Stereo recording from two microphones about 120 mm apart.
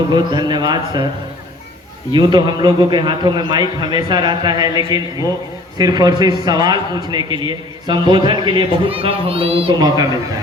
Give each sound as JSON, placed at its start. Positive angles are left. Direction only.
{"t": 0.1, "sound": "a man's voice", "side_deg": -40}
{"t": 2.1, "sound": "a man's voice", "side_deg": -35}
{"t": 9.7, "sound": "a man's voice", "side_deg": -35}